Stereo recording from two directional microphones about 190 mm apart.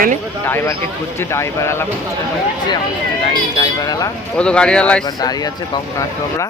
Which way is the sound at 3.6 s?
20° left (ahead or behind).